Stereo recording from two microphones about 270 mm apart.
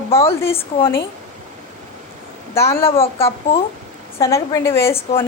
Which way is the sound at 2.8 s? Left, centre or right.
Left.